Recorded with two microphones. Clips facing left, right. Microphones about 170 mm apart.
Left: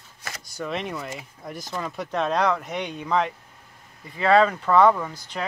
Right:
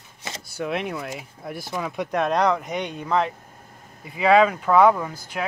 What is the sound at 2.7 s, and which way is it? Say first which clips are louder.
Speech: right 1 dB; centre (ahead or behind).